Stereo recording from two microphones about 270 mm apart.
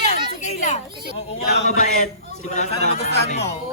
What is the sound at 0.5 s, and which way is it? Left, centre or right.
Children playing, left.